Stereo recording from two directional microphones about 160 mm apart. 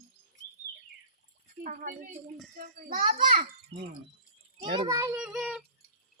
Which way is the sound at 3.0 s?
30° right (ahead or behind).